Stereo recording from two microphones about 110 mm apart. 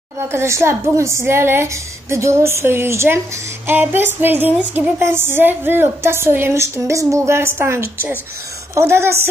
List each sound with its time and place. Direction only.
0.3 s a woman's voice: 25° right (ahead or behind)
3.6 s female singing: 20° right (ahead or behind)
4.7 s a woman's voice: 20° right (ahead or behind)